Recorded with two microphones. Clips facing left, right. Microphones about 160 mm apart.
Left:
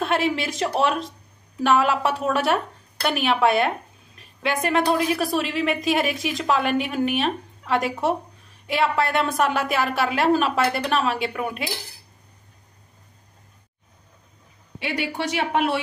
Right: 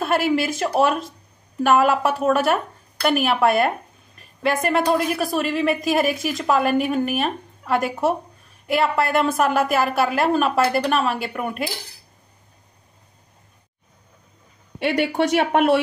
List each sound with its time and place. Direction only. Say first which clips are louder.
0.0 s a woman's voice: right 3 dB; 5° right (ahead or behind)
14.8 s speech: right 7 dB; 60° right (ahead or behind)